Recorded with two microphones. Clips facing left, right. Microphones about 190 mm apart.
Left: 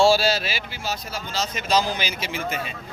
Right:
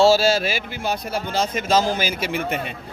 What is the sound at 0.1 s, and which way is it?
Speech, 45° right (ahead or behind).